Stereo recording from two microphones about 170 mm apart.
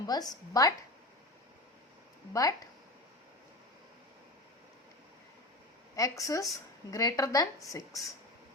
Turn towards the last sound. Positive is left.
turn(degrees=20)  # may be behind; listen again after turning